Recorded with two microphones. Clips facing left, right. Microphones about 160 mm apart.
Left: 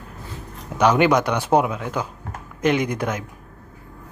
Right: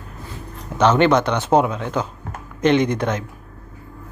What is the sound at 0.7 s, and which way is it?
Speech, 10° left (ahead or behind).